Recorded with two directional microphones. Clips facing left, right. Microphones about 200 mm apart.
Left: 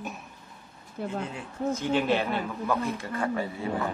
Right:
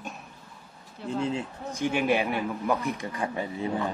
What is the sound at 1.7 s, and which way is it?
A man's voice, 10° right (ahead or behind).